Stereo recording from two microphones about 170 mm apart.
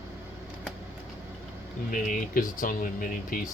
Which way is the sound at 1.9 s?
50° left (ahead or behind).